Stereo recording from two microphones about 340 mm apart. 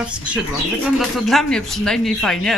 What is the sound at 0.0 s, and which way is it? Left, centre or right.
Speech, centre.